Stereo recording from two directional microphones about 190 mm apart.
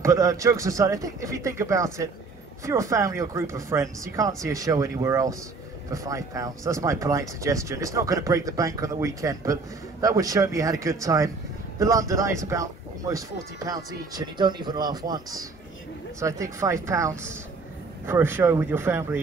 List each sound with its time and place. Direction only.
0.0 s speech: 15° right (ahead or behind)